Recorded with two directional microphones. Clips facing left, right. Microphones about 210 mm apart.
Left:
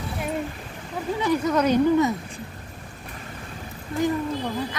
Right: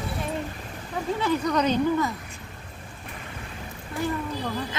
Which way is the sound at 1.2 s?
10° left (ahead or behind).